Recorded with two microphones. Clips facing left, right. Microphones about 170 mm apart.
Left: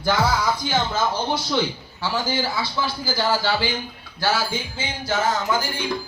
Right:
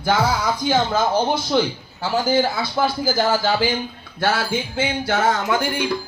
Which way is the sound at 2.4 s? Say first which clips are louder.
Right 5 dB; 50° right (ahead or behind).